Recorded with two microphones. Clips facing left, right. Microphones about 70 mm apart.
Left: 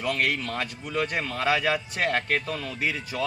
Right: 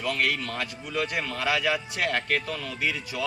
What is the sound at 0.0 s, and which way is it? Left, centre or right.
A man's voice, left.